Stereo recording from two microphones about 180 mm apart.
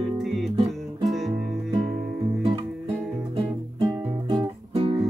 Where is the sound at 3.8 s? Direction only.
25° right (ahead or behind).